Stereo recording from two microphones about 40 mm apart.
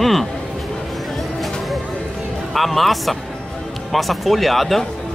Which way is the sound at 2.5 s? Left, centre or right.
Centre.